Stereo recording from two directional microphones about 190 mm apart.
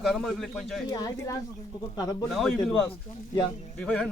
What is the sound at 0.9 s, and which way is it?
Speech, 20° left (ahead or behind).